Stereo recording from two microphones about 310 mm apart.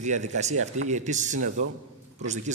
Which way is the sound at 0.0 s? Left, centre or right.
Right.